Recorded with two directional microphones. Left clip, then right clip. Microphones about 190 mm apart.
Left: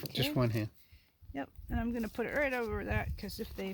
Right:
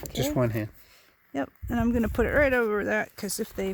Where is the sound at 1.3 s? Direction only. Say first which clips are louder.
Right 10 dB; 70° right (ahead or behind).